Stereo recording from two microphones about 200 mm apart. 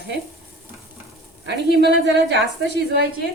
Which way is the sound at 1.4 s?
55° right (ahead or behind).